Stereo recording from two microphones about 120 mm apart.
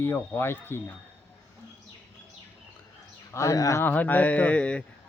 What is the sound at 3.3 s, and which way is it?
Speech, 25° left (ahead or behind).